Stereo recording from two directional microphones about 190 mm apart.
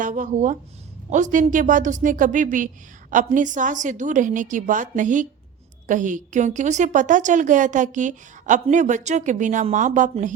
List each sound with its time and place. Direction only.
0.0 s a woman's voice: 40° right (ahead or behind)